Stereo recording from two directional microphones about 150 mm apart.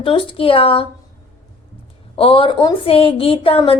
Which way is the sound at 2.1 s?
35° left (ahead or behind).